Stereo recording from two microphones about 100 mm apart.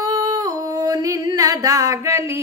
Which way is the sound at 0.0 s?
40° right (ahead or behind).